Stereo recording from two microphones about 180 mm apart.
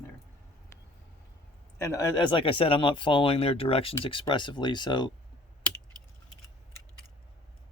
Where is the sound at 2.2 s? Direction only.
25° left (ahead or behind).